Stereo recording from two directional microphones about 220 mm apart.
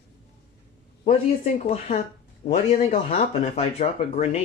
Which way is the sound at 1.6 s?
25° left (ahead or behind).